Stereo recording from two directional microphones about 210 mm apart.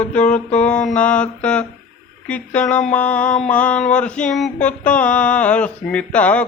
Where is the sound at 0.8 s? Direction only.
5° left (ahead or behind).